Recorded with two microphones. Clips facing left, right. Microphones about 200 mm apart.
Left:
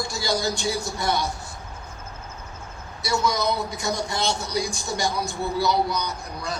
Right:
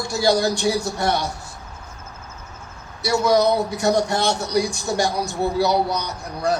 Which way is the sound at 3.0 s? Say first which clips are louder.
Right 7 dB; 60° right (ahead or behind).